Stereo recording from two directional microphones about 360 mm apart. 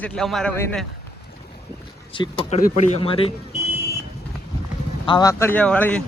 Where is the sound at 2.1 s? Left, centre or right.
Centre.